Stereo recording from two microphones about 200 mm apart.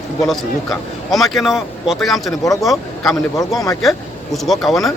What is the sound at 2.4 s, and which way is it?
Speech, 15° left (ahead or behind).